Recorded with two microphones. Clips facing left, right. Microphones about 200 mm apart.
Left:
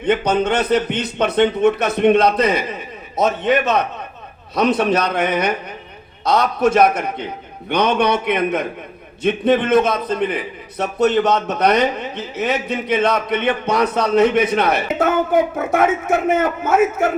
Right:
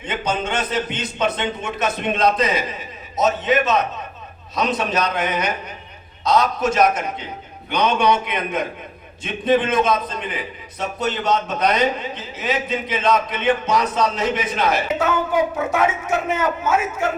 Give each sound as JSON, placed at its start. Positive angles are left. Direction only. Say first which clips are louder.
{"t": 0.0, "sound": "a man's voice", "louder": "left 7 dB", "side_deg": 60}